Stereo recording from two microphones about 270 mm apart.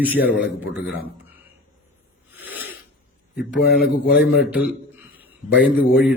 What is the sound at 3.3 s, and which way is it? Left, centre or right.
Speech, left.